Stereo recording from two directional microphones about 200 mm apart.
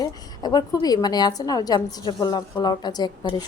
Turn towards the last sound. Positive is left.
turn(degrees=20)  # may be behind; listen again after turning